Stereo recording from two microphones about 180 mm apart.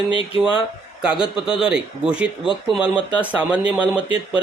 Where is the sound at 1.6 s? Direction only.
5° right (ahead or behind).